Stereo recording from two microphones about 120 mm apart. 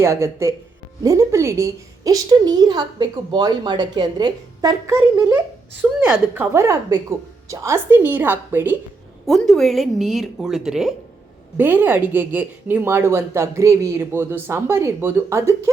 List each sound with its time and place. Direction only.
0.0 s a woman's voice: 20° right (ahead or behind)
9.2 s a woman's voice: centre (ahead or behind)
11.5 s speech: 15° right (ahead or behind)